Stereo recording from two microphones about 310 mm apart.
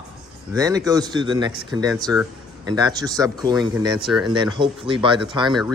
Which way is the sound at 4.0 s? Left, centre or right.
Centre.